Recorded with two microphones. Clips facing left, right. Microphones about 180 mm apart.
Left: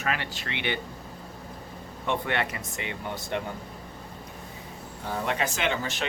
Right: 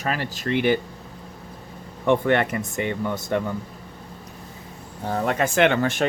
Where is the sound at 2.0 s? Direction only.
50° right (ahead or behind).